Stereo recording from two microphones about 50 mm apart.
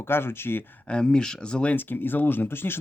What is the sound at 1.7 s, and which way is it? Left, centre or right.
Speech, left.